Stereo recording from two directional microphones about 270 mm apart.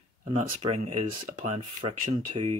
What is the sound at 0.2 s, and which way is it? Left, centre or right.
Speech, right.